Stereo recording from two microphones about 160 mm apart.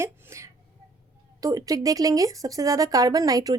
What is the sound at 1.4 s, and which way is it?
A woman's voice, 20° right (ahead or behind).